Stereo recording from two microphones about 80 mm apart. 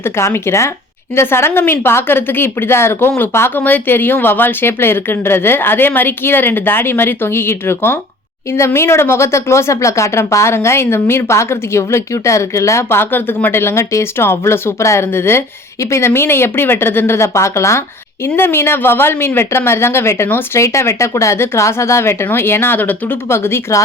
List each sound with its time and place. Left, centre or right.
0.0 s speech: left